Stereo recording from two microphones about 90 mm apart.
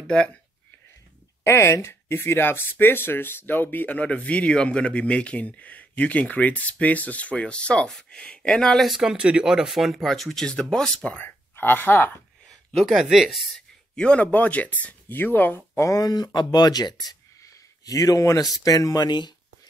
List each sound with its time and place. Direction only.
0.0 s speech: 15° left (ahead or behind)
1.4 s speech: 30° left (ahead or behind); by 10.9 s 10° left (ahead or behind)
11.1 s speech: 20° left (ahead or behind)
12.4 s speech: centre (ahead or behind)
13.9 s speech: 10° left (ahead or behind); by 19.0 s 40° left (ahead or behind)
19.0 s speech: 55° left (ahead or behind)